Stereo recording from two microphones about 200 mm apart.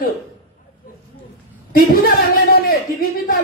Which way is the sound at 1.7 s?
45° left (ahead or behind).